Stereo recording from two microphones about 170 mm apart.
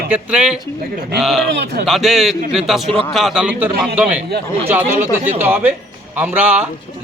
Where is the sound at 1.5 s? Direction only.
75° right (ahead or behind).